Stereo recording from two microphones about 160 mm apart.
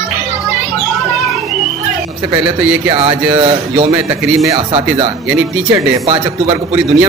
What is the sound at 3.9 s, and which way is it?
Speech, 20° right (ahead or behind).